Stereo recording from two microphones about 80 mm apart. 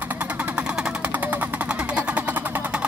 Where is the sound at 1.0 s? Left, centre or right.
Centre.